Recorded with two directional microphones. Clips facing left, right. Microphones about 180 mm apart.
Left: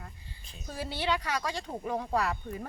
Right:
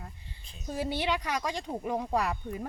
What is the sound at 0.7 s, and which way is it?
Speech, 15° right (ahead or behind).